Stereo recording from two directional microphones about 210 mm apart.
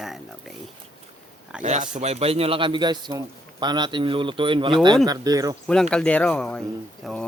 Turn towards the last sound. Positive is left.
turn(degrees=5)  # may be behind; listen again after turning